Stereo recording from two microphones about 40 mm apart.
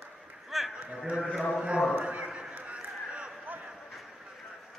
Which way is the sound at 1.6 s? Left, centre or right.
Right.